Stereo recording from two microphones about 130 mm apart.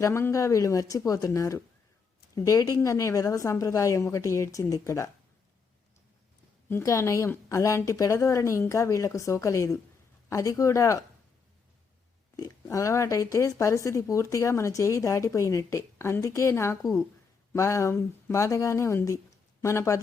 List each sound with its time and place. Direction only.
0.0 s speech: 20° left (ahead or behind)
6.7 s speech: 20° left (ahead or behind)
12.4 s speech: 25° left (ahead or behind)